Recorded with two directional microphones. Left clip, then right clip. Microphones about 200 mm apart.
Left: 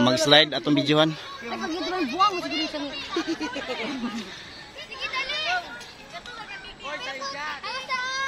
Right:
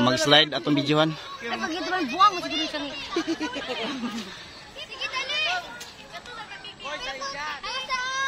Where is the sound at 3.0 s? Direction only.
40° right (ahead or behind).